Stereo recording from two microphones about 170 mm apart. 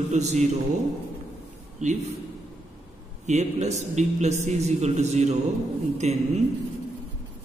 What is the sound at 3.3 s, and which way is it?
A man's voice, 40° right (ahead or behind).